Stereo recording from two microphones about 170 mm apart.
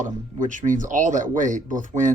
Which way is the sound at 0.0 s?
50° right (ahead or behind).